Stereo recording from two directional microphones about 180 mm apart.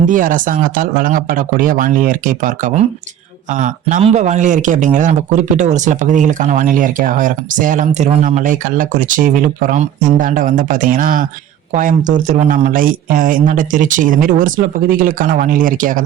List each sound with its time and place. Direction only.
0.0 s a man's voice: 50° right (ahead or behind)